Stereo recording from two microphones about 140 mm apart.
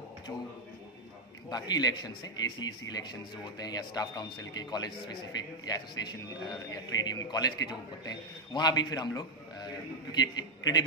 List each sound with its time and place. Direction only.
1.5 s a man's voice: 30° left (ahead or behind)